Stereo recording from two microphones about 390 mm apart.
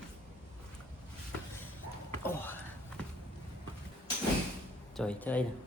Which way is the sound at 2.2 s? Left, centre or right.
Centre.